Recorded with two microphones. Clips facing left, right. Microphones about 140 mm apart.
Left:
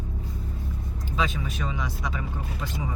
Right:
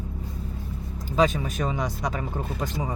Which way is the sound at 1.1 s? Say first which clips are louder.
Right 7 dB; 45° right (ahead or behind).